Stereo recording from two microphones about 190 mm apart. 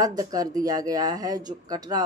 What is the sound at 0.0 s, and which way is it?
Speech, 20° right (ahead or behind).